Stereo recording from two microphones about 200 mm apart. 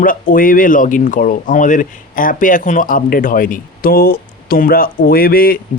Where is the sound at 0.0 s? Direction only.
45° left (ahead or behind).